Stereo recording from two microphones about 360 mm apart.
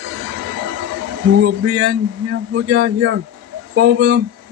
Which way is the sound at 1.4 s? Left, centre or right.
Right.